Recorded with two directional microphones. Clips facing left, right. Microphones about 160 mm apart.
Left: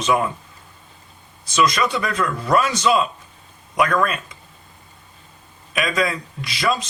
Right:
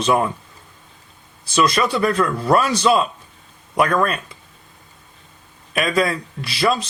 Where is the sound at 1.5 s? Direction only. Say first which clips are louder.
Right 1 dB; 30° right (ahead or behind).